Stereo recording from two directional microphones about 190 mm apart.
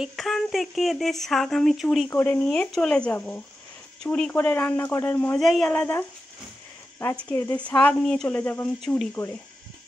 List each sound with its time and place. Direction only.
0.0 s speech: centre (ahead or behind)
2.0 s speech: 10° left (ahead or behind)
8.8 s speech: centre (ahead or behind)